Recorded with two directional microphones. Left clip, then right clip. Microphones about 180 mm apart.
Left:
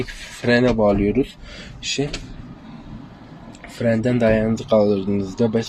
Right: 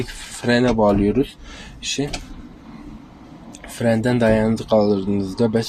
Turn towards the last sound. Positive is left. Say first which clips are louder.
# right 1 dB
turn(degrees=-5)  # may be behind; listen again after turning